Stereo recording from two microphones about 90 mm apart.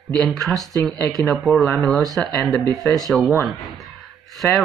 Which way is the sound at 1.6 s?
20° left (ahead or behind).